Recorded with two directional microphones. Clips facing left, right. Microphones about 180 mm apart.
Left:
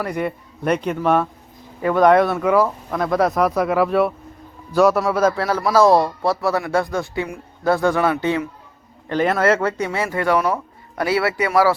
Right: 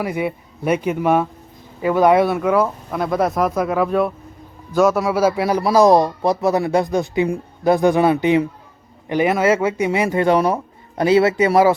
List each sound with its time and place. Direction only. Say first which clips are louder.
0.0 s a man's voice: right 1 dB; 5° right (ahead or behind)